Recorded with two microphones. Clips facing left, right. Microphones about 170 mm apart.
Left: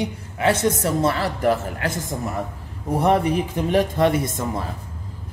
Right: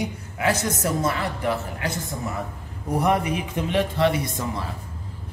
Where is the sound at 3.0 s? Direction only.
35° left (ahead or behind).